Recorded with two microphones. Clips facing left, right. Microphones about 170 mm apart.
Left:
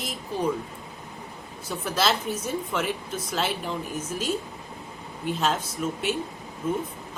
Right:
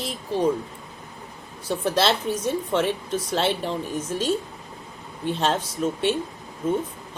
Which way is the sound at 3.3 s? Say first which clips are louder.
Right 4 dB; 30° right (ahead or behind).